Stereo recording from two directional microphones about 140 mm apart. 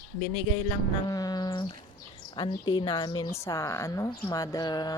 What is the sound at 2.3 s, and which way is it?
Speech, 35° left (ahead or behind).